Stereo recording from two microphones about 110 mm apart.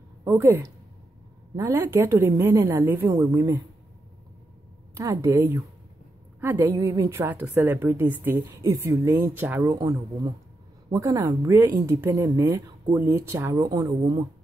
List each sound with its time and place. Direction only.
0.2 s speech: 30° right (ahead or behind)
3.1 s speech: 30° right (ahead or behind)
4.9 s speech: 30° right (ahead or behind)
6.7 s speech: 30° right (ahead or behind)
9.8 s a woman's voice: 30° right (ahead or behind)